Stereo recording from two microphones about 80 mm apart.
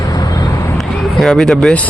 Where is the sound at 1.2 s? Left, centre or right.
Centre.